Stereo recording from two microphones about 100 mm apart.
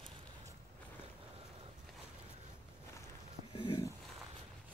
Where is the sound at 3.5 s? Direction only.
50° left (ahead or behind).